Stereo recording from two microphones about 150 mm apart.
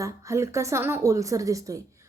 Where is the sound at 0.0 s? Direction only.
20° right (ahead or behind).